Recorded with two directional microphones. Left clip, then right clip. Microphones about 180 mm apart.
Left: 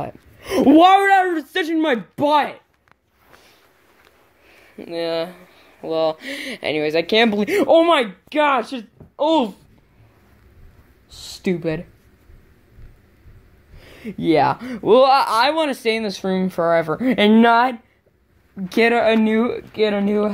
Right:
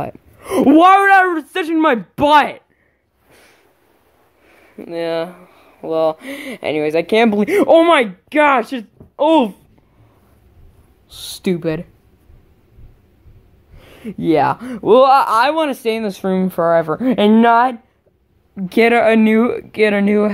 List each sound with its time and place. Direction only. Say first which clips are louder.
0.0 s a woman's voice: right 4 dB; 15° right (ahead or behind)
0.7 s speech: right 3 dB; centre (ahead or behind)
4.7 s speech: right 3 dB; 15° right (ahead or behind)
11.1 s speech: right 3 dB; 10° right (ahead or behind)
13.7 s speech: right 2 dB; 5° right (ahead or behind)
18.6 s speech: right 4 dB; 15° right (ahead or behind)